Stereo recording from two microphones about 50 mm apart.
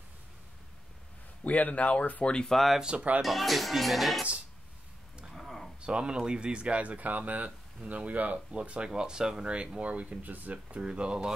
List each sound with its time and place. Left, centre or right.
1.4 s speech: left
2.5 s speech: centre
5.3 s a sound: centre
5.8 s speech: centre; by 8.4 s right
8.5 s speech: right
10.8 s speech: centre